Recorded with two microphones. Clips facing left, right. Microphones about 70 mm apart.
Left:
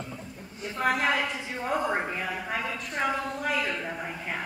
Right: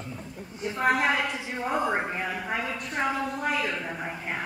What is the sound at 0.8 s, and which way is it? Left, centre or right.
A woman's voice, centre.